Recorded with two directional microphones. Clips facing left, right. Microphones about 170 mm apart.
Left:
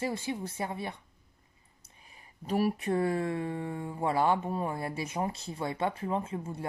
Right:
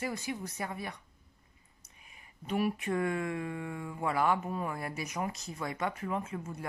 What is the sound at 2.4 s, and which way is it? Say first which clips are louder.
Speech: left 3 dB; 35° left (ahead or behind).